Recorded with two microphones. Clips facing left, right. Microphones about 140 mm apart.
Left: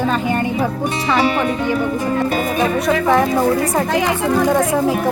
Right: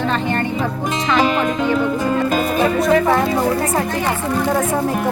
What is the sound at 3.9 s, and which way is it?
Speech, 90° left.